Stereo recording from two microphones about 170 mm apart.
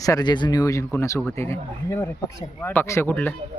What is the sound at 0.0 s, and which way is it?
Speech, 20° left (ahead or behind).